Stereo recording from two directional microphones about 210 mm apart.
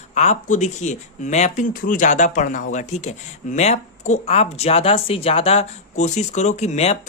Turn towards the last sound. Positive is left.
turn(degrees=30)  # may be behind; listen again after turning